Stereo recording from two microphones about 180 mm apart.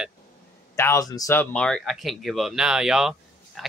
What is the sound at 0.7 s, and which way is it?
Speech, 15° left (ahead or behind).